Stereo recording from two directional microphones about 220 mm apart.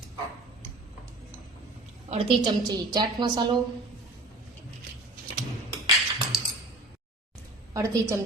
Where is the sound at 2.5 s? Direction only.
15° right (ahead or behind).